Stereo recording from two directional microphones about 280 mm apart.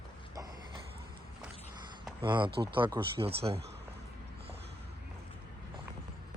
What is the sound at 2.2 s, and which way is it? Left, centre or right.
Speech, centre.